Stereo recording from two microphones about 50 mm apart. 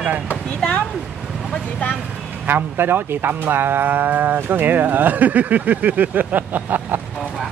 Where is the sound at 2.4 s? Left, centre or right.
Right.